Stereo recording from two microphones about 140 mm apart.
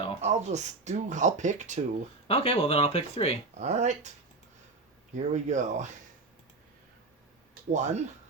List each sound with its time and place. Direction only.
0.2 s speech: 55° right (ahead or behind)
2.2 s speech: 45° left (ahead or behind)
3.6 s speech: 55° right (ahead or behind)
5.1 s speech: 60° right (ahead or behind)
7.7 s speech: 55° right (ahead or behind)